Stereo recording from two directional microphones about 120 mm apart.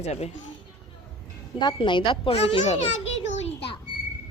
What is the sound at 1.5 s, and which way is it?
A child's voice, 40° left (ahead or behind).